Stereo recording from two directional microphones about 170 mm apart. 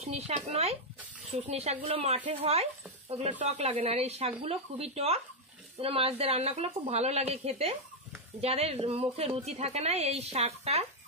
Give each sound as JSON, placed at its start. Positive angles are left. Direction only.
{"t": 0.0, "sound": "speech", "side_deg": -40}